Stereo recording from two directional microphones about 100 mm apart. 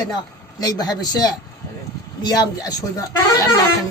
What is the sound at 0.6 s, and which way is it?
Speech, 40° left (ahead or behind).